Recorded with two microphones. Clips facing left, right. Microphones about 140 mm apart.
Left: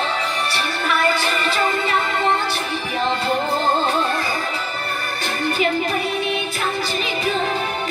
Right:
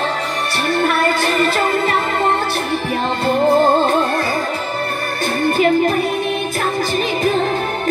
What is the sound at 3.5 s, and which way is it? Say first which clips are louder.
Music: right 11 dB; 50° right (ahead or behind).